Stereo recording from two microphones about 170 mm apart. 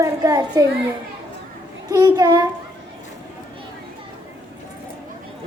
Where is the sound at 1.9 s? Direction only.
25° right (ahead or behind).